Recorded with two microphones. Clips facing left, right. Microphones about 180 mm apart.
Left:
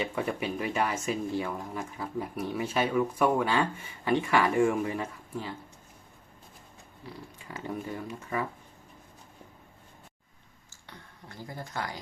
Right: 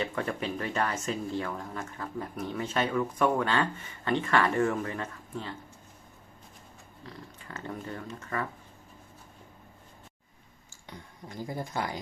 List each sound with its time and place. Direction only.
0.0 s speech: 10° left (ahead or behind)
7.0 s speech: 10° left (ahead or behind)
10.8 s speech: 15° right (ahead or behind)